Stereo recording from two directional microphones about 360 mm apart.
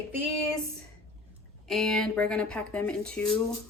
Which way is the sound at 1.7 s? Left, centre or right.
Centre.